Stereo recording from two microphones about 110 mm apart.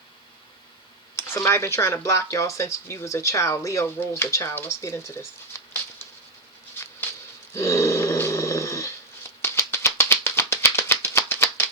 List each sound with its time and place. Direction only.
1.1 s speech: 25° left (ahead or behind)
7.5 s dog: 25° left (ahead or behind)
9.4 s rattle: 25° left (ahead or behind)